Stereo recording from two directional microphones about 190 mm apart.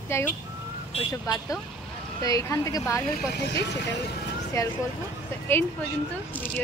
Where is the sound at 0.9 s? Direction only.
20° left (ahead or behind).